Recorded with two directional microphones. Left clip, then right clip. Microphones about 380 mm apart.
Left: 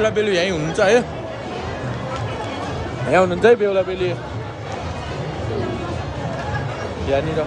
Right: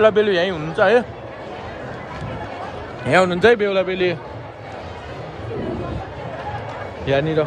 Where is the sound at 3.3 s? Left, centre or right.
Centre.